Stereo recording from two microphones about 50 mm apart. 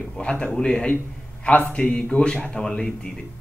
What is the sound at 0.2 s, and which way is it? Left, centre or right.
A man's voice, left.